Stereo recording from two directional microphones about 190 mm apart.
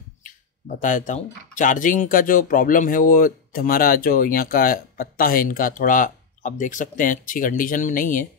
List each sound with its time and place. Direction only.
0.2 s speech: 45° left (ahead or behind)